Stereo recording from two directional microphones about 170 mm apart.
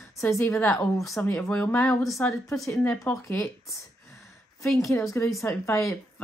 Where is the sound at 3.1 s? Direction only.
20° left (ahead or behind).